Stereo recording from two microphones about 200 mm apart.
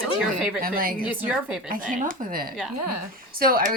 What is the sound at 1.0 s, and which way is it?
Speech, 5° right (ahead or behind).